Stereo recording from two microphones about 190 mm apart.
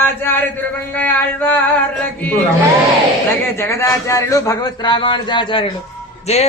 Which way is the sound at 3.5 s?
15° left (ahead or behind).